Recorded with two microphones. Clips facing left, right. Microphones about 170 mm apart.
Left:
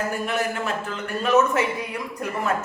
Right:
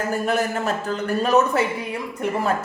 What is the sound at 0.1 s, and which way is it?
Speech, 40° right (ahead or behind).